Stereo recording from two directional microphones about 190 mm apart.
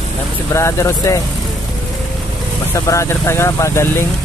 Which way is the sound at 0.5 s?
15° left (ahead or behind).